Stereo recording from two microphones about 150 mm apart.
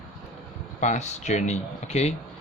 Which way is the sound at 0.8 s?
50° left (ahead or behind).